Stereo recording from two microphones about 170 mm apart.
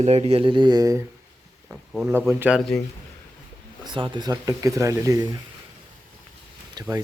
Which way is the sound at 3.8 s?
30° right (ahead or behind).